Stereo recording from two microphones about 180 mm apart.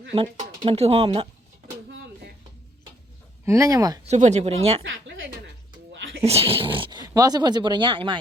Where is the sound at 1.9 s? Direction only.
90° right.